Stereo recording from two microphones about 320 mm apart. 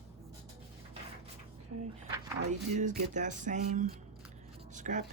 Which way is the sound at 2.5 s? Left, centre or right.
Right.